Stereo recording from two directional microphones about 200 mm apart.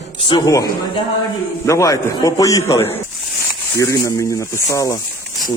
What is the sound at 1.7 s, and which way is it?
Speech, 15° left (ahead or behind).